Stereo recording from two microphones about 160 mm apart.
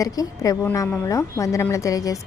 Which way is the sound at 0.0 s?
20° left (ahead or behind).